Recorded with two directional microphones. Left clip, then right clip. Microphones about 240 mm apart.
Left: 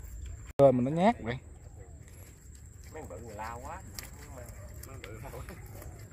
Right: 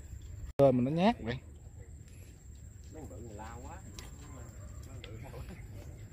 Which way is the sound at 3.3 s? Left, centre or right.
Left.